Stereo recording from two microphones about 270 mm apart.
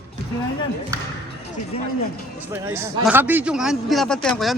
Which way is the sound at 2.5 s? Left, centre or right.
Centre.